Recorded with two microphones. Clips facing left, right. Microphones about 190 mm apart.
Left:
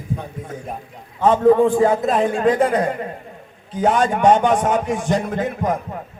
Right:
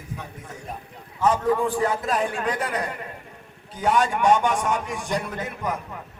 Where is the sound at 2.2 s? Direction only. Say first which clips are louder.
Left 10 dB; 40° left (ahead or behind).